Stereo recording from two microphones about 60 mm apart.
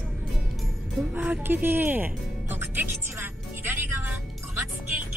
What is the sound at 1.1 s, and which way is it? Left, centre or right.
Speech, right.